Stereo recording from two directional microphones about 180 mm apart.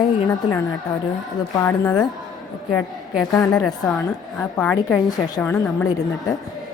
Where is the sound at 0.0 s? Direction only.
20° left (ahead or behind).